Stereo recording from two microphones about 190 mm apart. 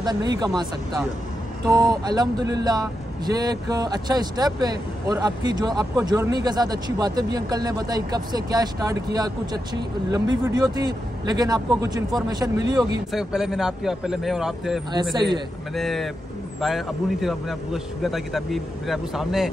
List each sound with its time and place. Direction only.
0.0 s speech: 20° right (ahead or behind)
1.7 s speech: 20° right (ahead or behind)
13.1 s a man's voice: 5° right (ahead or behind)